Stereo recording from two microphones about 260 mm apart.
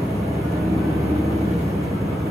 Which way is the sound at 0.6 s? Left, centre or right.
Centre.